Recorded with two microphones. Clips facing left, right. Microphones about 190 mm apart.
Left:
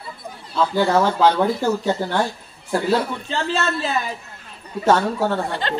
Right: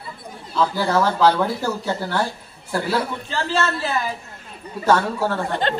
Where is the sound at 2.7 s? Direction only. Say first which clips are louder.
Left 3 dB; 20° left (ahead or behind).